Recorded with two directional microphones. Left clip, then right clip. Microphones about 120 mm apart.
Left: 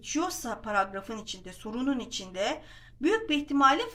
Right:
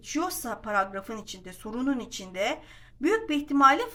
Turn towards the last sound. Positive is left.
turn(degrees=-25)  # may be behind; listen again after turning